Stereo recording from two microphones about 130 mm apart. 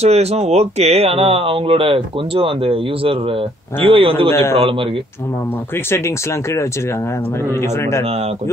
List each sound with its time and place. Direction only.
0.0 s speech: 55° right (ahead or behind)
4.3 s a man's voice: 15° left (ahead or behind)
4.6 s speech: 45° right (ahead or behind)
5.9 s speech: 20° left (ahead or behind)